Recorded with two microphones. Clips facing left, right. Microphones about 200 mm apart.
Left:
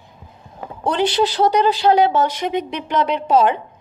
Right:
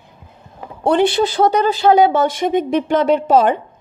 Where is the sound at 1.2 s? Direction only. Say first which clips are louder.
Right 1 dB; 50° right (ahead or behind).